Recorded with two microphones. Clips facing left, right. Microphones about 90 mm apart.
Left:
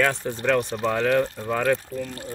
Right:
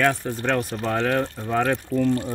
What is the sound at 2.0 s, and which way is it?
Speech, 30° right (ahead or behind).